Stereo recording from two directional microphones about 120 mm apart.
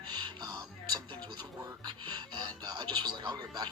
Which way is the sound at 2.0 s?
40° right (ahead or behind).